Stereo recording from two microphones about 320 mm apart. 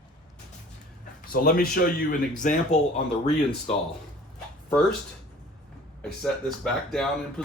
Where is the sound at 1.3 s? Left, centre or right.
Left.